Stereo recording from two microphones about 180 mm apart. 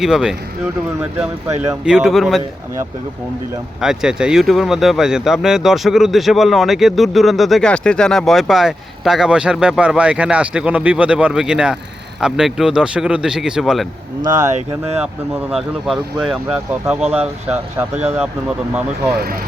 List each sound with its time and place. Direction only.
0.0 s speech: 5° right (ahead or behind)
1.8 s speech: 5° right (ahead or behind)
3.8 s speech: 5° right (ahead or behind)
14.3 s speech: 40° right (ahead or behind)
15.0 s speech: 5° right (ahead or behind)
17.0 s speech: 35° right (ahead or behind)
18.2 s speech: 5° right (ahead or behind)
19.1 s speech: 60° right (ahead or behind)